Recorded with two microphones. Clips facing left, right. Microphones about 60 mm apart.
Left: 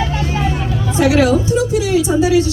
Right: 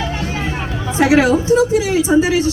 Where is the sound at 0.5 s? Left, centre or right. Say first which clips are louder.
Left 2 dB; right.